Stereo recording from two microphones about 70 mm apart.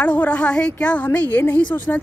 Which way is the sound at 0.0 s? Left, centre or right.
Left.